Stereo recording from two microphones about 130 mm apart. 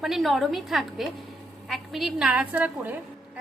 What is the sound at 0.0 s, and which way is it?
A woman's voice, centre (ahead or behind).